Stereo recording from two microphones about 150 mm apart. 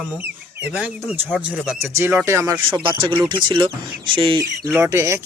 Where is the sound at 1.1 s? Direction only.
5° right (ahead or behind).